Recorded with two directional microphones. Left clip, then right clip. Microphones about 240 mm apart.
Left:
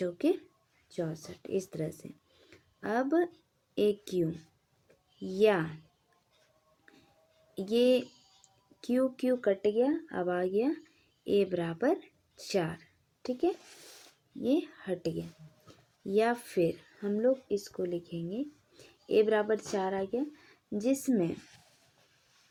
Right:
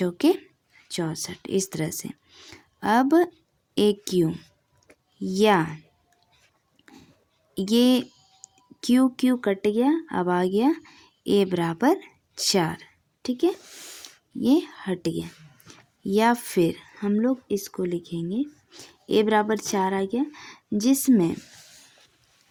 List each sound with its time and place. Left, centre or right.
0.0 s speech: right
7.7 s speech: right
14.4 s speech: right